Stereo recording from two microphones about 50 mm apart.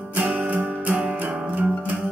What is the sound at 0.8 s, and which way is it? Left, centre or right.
Music, right.